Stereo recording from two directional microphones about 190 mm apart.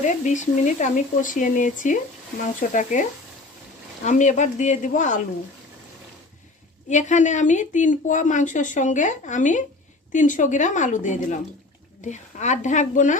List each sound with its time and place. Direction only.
0.0 s a woman's voice: 40° left (ahead or behind)
6.9 s a woman's voice: 40° left (ahead or behind)